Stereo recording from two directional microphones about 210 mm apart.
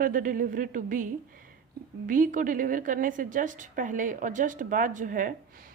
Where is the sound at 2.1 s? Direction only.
40° right (ahead or behind).